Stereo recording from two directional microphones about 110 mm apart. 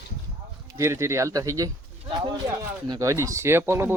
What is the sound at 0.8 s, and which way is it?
Speech, 25° right (ahead or behind).